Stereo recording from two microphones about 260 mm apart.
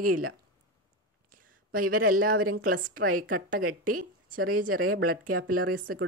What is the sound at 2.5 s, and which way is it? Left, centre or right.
Speech, right.